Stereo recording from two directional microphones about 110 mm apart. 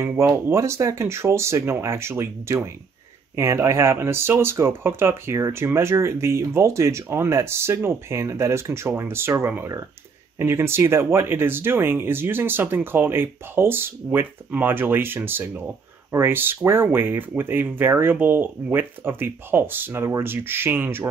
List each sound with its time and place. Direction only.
0.0 s speech: 25° right (ahead or behind)